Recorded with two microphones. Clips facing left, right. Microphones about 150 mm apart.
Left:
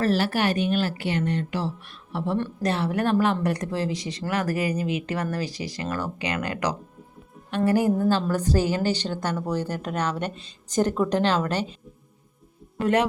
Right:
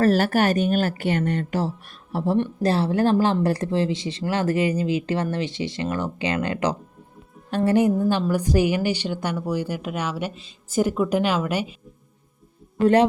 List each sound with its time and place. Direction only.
0.0 s speech: 45° right (ahead or behind); by 11.8 s 10° right (ahead or behind)
12.8 s a man's voice: 30° right (ahead or behind)